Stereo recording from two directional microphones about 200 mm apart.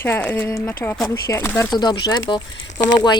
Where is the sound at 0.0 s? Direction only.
10° left (ahead or behind).